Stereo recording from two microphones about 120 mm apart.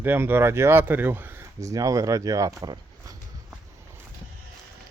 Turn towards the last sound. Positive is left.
turn(degrees=-30)  # may be behind; listen again after turning